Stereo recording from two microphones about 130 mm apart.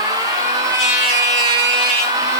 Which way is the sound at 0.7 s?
30° right (ahead or behind).